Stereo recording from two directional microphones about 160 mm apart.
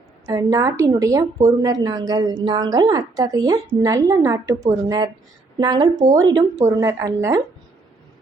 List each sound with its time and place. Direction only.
0.3 s a woman's voice: 20° right (ahead or behind)